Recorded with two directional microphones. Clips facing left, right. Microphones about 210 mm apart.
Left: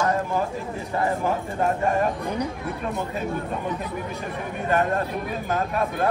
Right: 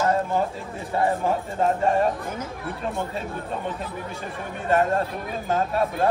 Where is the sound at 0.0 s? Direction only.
30° right (ahead or behind).